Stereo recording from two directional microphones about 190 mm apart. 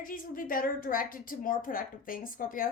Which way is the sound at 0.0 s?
45° left (ahead or behind).